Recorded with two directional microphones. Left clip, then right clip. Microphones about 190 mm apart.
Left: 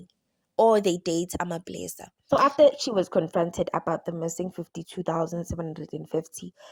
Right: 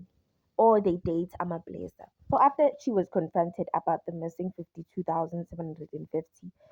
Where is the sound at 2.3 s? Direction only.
45° left (ahead or behind).